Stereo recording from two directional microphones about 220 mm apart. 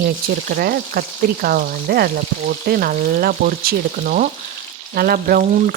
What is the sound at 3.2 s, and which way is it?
Speech, 45° right (ahead or behind).